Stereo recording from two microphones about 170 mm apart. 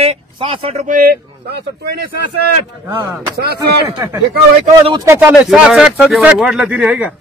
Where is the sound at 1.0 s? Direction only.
65° right (ahead or behind).